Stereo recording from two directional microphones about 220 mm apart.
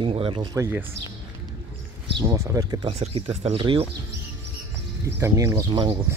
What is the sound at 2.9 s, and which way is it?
Speech, 30° right (ahead or behind).